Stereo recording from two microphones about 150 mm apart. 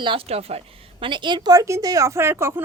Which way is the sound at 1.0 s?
30° right (ahead or behind).